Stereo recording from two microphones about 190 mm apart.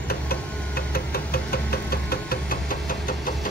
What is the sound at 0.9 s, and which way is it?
Engine, 50° left (ahead or behind).